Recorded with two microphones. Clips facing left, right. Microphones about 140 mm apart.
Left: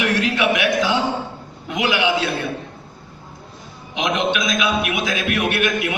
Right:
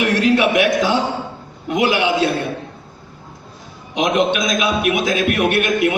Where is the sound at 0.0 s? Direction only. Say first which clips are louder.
Right 4 dB; 40° right (ahead or behind).